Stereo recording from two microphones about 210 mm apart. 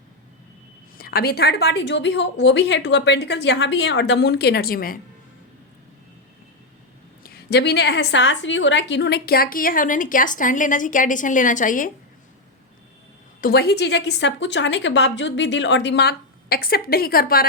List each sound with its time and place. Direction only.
0.9 s a woman's voice: 45° left (ahead or behind)
7.2 s a woman's voice: 45° left (ahead or behind)
13.4 s a woman's voice: 50° left (ahead or behind)